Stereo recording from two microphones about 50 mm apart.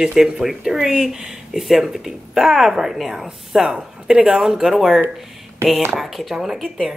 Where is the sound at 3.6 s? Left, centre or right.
Centre.